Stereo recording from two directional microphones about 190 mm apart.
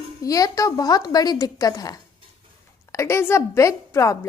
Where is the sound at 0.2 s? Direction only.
20° left (ahead or behind).